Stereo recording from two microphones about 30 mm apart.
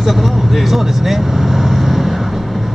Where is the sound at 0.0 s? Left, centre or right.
Centre.